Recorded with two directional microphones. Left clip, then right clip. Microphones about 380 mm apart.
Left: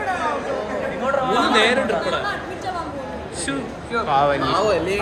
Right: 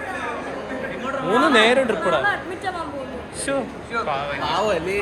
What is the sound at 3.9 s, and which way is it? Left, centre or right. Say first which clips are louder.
Speech: left 7 dB; centre.